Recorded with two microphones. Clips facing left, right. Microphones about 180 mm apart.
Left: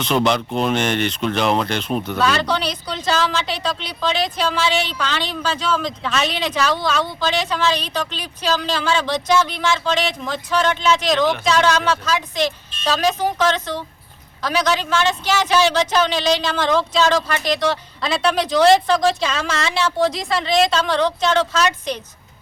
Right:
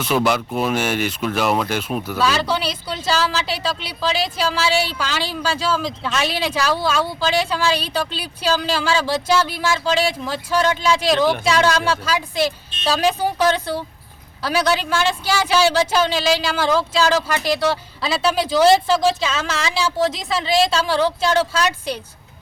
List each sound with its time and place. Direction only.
0.0 s speech: 5° right (ahead or behind)